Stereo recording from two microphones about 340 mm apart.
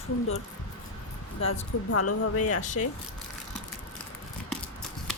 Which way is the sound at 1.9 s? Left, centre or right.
Left.